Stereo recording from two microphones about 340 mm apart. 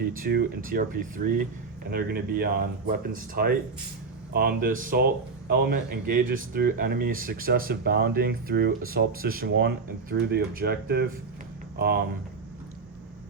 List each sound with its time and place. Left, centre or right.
0.0 s speech: right